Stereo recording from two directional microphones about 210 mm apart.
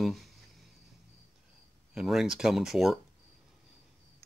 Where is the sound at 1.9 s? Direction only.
Centre (ahead or behind).